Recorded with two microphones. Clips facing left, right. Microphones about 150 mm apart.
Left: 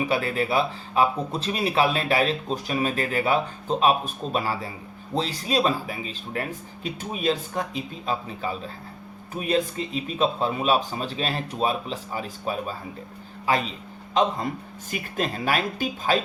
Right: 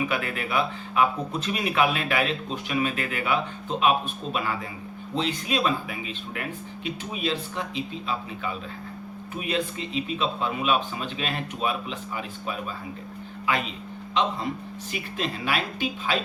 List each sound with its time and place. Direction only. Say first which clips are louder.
0.1 s speech: left 4 dB; 30° left (ahead or behind)